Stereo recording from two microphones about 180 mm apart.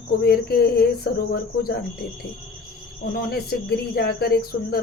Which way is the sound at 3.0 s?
60° left (ahead or behind).